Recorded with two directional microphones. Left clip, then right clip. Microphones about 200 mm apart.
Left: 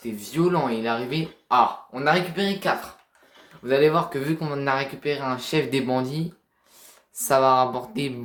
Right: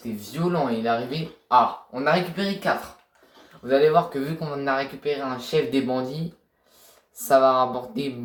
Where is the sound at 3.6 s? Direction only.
40° left (ahead or behind).